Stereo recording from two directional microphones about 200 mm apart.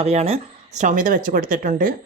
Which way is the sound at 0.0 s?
30° right (ahead or behind).